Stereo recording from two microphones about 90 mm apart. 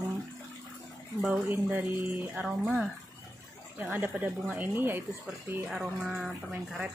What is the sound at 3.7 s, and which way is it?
Speech, 20° right (ahead or behind).